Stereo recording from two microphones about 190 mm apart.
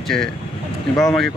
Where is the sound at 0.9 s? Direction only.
5° left (ahead or behind).